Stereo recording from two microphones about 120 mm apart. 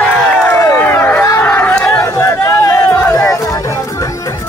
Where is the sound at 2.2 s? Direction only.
25° left (ahead or behind).